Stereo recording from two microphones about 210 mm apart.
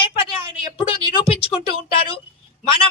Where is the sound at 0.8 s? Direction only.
25° left (ahead or behind).